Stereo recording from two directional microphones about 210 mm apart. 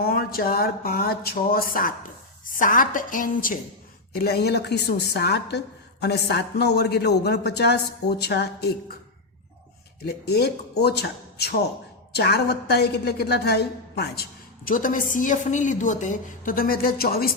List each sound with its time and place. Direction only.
0.0 s a woman's voice: 45° left (ahead or behind)
10.0 s a woman's voice: 50° left (ahead or behind)